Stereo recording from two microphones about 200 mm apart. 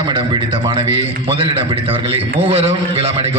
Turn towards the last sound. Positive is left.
turn(degrees=-30)  # may be behind; listen again after turning